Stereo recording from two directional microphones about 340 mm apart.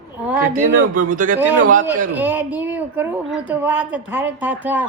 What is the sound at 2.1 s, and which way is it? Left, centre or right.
Speech, centre.